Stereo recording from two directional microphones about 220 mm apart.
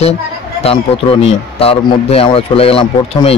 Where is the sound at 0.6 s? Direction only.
25° left (ahead or behind).